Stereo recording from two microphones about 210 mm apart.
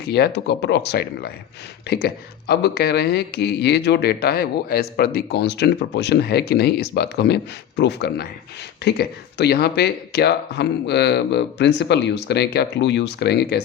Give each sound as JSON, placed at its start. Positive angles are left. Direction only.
{"t": 0.1, "sound": "speech", "side_deg": 50}